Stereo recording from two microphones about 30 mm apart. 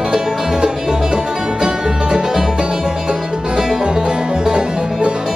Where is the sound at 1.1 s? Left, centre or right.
Right.